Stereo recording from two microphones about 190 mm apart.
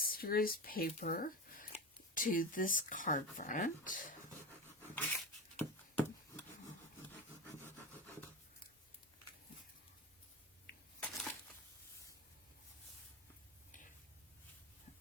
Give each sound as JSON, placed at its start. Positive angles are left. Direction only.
{"t": 0.0, "sound": "speech", "side_deg": 50}
{"t": 5.5, "sound": "a sound", "side_deg": 10}
{"t": 11.0, "sound": "crushing", "side_deg": 5}